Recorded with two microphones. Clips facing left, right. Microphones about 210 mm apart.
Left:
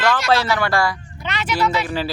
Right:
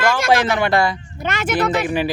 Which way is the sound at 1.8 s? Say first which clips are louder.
Right 4 dB; 15° right (ahead or behind).